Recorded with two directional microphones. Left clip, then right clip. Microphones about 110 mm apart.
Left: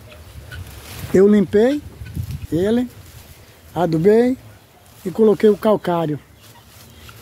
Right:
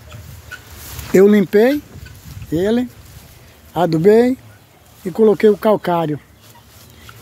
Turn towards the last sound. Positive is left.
turn(degrees=-5)  # may be behind; listen again after turning